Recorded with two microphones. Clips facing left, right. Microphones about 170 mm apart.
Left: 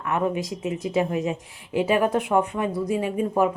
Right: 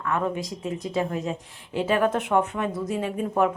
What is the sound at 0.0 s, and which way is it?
Speech, 15° left (ahead or behind).